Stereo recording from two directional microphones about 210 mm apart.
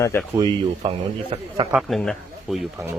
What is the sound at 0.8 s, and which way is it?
Speech, 25° right (ahead or behind).